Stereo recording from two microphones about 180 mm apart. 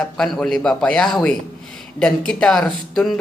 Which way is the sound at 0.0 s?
5° left (ahead or behind).